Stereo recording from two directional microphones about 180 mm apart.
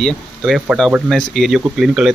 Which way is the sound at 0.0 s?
Centre (ahead or behind).